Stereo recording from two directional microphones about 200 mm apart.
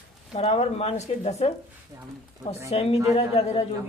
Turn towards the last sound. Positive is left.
turn(degrees=30)  # may be behind; listen again after turning